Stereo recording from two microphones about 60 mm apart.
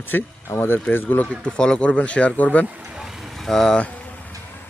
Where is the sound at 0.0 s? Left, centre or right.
Left.